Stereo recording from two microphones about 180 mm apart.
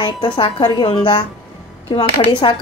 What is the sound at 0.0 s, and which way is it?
Speech, 25° left (ahead or behind).